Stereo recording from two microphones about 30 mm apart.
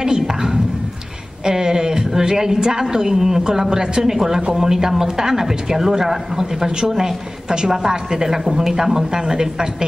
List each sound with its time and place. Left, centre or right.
0.0 s a sound: right
1.4 s a woman's voice: centre
6.9 s a woman's voice: centre
7.4 s a woman's voice: right